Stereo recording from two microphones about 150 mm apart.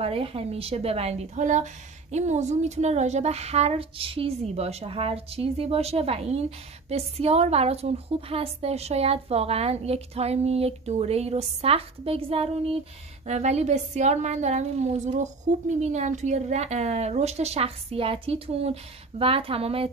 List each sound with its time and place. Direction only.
0.0 s a woman's voice: 40° right (ahead or behind)